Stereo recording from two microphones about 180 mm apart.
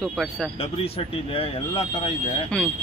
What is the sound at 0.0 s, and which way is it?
Speech, centre (ahead or behind).